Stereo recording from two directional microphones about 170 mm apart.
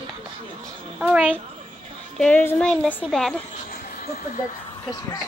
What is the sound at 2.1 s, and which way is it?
Speech, 10° left (ahead or behind).